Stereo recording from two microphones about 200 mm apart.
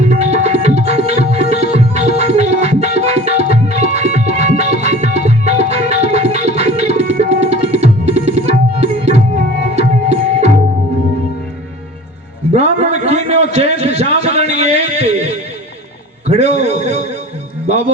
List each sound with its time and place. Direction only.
0.0 s music: 35° right (ahead or behind)
7.1 s tabla: 35° right (ahead or behind)
9.7 s music: 35° right (ahead or behind)
12.5 s a sound: 35° right (ahead or behind)